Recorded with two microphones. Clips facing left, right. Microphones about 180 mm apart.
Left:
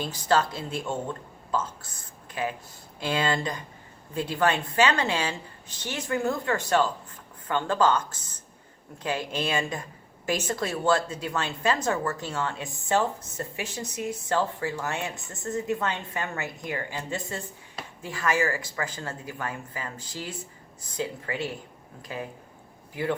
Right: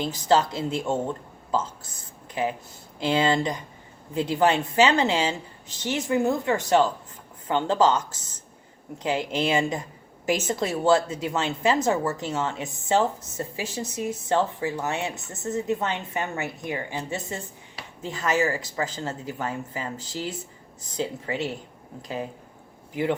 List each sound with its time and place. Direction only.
0.0 s a woman's voice: 20° right (ahead or behind)
9.0 s a woman's voice: 20° right (ahead or behind)
21.0 s a woman's voice: 20° right (ahead or behind)